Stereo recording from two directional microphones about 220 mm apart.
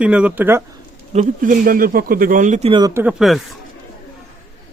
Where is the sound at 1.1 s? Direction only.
40° right (ahead or behind).